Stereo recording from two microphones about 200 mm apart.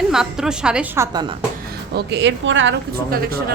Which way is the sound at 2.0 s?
60° right (ahead or behind).